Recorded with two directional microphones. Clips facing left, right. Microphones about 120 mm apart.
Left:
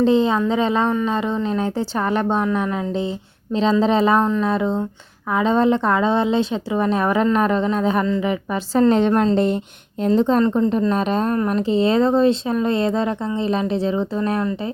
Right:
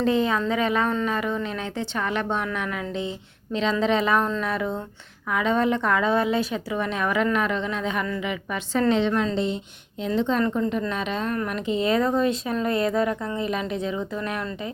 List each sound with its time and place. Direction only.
0.0 s a woman's voice: 30° left (ahead or behind)
8.9 s a woman's voice: 45° left (ahead or behind)
10.1 s a woman's voice: 35° left (ahead or behind)
10.4 s a woman's voice: 25° left (ahead or behind)
10.7 s a woman's voice: 35° left (ahead or behind)